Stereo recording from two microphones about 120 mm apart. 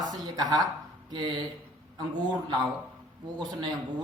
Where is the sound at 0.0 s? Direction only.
35° right (ahead or behind).